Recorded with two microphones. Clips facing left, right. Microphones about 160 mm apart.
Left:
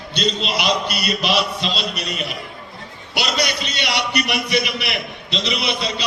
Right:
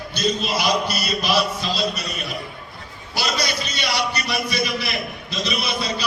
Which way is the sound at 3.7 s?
20° left (ahead or behind).